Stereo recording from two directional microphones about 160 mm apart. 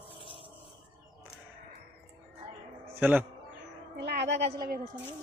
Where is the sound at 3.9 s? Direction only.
90° right; by 4.8 s 70° right (ahead or behind).